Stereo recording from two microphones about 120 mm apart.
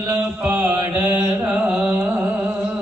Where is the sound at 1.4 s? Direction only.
10° right (ahead or behind).